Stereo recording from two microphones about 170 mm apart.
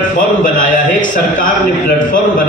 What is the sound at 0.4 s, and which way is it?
A man's voice, 50° left (ahead or behind).